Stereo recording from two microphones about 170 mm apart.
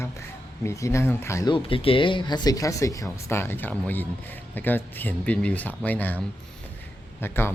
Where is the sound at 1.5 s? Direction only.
30° left (ahead or behind); by 7.4 s 15° left (ahead or behind).